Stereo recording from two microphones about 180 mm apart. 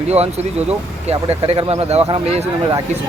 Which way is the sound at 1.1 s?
35° right (ahead or behind).